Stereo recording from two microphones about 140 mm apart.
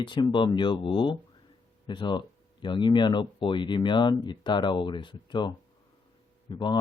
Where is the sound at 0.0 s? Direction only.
35° left (ahead or behind).